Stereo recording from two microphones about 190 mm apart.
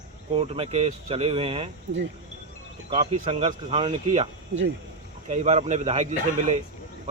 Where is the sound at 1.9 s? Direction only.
65° right (ahead or behind).